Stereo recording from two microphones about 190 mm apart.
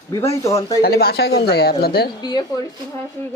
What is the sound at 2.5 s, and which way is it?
Speech, 20° left (ahead or behind).